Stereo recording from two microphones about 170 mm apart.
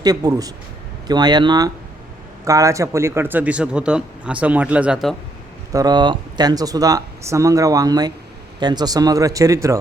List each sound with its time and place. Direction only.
0.0 s a man's voice: 20° right (ahead or behind); by 5.1 s 5° right (ahead or behind)
5.7 s speech: 25° right (ahead or behind)